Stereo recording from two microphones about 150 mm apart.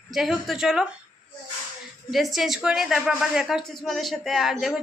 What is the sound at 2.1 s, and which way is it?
A woman's voice, centre (ahead or behind).